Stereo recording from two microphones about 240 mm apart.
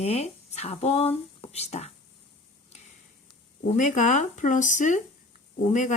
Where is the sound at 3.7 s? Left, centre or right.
Left.